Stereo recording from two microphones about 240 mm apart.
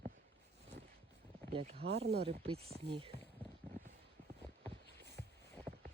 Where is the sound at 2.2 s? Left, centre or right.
Right.